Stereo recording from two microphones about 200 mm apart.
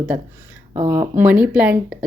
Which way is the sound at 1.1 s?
10° right (ahead or behind).